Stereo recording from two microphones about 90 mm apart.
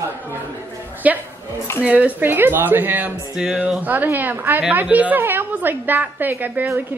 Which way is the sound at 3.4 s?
10° right (ahead or behind).